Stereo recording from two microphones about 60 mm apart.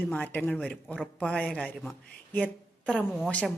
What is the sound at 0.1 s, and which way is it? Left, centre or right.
Speech, left.